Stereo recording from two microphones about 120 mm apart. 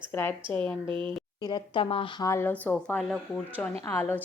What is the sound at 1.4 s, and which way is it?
Speech, 40° left (ahead or behind).